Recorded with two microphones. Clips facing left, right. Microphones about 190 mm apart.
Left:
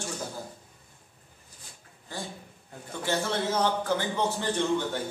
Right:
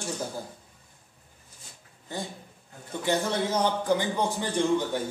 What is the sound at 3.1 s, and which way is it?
A man's voice, 15° right (ahead or behind).